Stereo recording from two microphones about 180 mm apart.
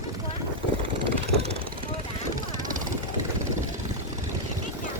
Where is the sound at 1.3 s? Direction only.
35° right (ahead or behind).